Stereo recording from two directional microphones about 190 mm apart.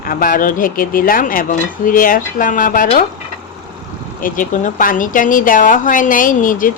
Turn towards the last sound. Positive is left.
turn(degrees=45)  # may be behind; listen again after turning